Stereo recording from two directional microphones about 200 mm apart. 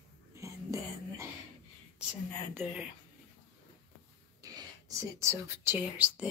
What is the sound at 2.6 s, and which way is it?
Speech, 10° right (ahead or behind).